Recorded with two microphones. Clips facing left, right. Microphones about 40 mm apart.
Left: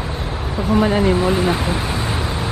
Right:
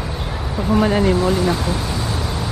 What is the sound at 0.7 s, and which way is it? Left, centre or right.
Speech, centre.